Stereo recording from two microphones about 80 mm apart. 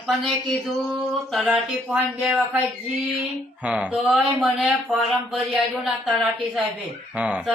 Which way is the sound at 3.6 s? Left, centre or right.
Centre.